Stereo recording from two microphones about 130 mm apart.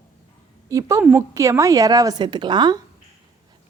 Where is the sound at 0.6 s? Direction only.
25° right (ahead or behind).